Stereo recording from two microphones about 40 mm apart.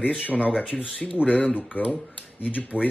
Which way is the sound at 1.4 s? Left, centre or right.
Left.